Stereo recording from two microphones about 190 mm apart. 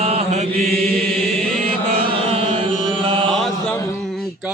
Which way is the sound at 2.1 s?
30° right (ahead or behind).